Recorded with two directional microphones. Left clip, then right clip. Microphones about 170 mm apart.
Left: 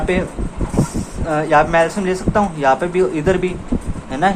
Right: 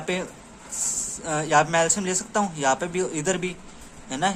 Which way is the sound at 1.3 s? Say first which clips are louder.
Left 7 dB; 35° right (ahead or behind).